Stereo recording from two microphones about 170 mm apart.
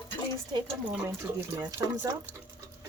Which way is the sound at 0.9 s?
10° right (ahead or behind).